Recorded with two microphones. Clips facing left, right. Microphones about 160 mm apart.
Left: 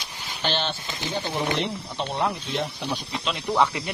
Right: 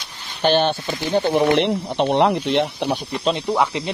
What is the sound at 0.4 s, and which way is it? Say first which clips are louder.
Speech: right 11 dB; 50° right (ahead or behind).